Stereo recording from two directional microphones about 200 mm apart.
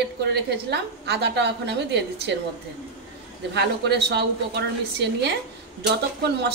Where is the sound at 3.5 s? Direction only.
55° right (ahead or behind).